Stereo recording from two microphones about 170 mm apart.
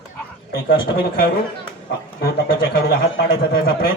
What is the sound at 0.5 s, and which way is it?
A man's voice, 60° left (ahead or behind).